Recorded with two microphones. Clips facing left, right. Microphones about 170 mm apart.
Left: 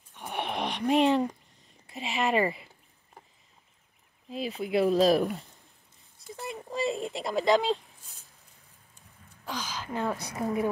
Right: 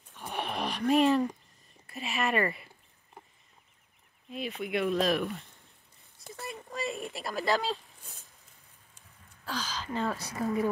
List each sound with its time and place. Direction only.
0.1 s a sound: 15° left (ahead or behind)
1.9 s speech: 20° left (ahead or behind)
4.3 s speech: 30° left (ahead or behind)
6.3 s speech: 20° left (ahead or behind)
9.4 s speech: 15° left (ahead or behind)